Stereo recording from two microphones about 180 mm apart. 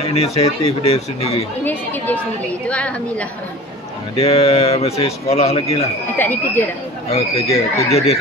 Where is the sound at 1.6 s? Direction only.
10° left (ahead or behind).